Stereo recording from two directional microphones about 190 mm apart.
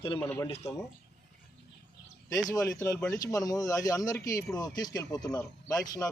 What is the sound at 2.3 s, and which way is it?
Speech, 20° left (ahead or behind).